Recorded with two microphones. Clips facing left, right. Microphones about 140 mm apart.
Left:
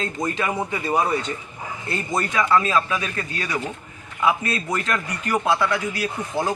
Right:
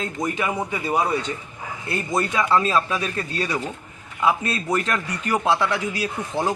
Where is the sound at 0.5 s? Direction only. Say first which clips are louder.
Left 1 dB; centre (ahead or behind).